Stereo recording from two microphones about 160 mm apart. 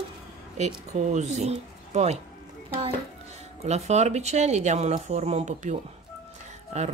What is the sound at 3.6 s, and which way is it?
Speech, 45° right (ahead or behind).